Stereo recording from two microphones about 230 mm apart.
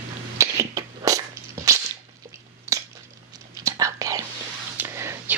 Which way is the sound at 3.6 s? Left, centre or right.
Centre.